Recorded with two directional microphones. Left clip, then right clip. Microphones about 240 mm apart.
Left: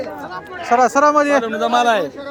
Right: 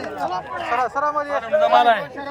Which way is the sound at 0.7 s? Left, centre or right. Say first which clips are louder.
Left 9 dB; left.